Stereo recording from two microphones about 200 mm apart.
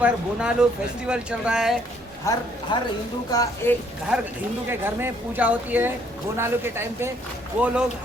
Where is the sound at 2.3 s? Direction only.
15° left (ahead or behind).